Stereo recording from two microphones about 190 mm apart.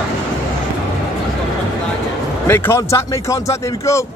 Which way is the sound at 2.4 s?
10° left (ahead or behind).